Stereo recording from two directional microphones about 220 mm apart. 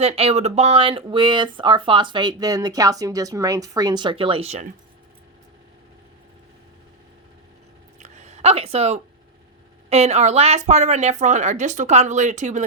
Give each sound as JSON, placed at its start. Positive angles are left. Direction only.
{"t": 0.0, "sound": "speech", "side_deg": -30}
{"t": 7.9, "sound": "a sound", "side_deg": -30}
{"t": 9.9, "sound": "speech", "side_deg": -30}